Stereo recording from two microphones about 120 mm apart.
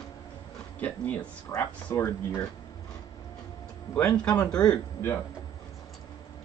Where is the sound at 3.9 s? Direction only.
10° left (ahead or behind).